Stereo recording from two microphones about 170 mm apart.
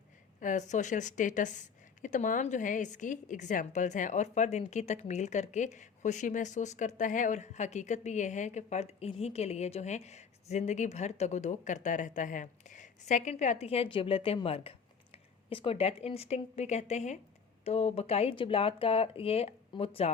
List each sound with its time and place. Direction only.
0.3 s speech: 50° left (ahead or behind)